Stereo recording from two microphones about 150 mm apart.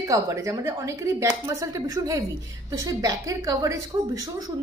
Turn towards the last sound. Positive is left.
turn(degrees=-20)  # may be behind; listen again after turning